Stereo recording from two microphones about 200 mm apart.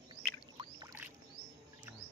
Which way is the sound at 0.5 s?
20° right (ahead or behind).